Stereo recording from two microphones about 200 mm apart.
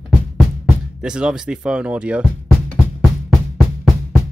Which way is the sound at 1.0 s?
5° right (ahead or behind).